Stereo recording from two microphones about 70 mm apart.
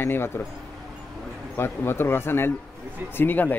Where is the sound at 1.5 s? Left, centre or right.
Left.